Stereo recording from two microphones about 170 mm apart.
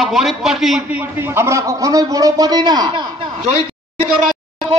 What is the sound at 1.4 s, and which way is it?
A man's voice, 15° right (ahead or behind).